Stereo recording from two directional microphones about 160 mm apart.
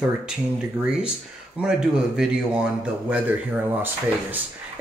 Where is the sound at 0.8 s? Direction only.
5° right (ahead or behind).